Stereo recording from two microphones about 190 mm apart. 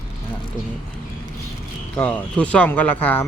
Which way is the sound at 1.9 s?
10° left (ahead or behind).